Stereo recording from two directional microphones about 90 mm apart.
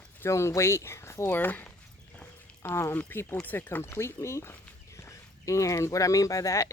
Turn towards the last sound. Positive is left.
turn(degrees=40)  # may be behind; listen again after turning